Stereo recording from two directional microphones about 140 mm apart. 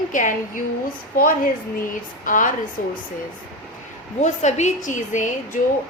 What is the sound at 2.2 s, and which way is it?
Speech, 70° left (ahead or behind).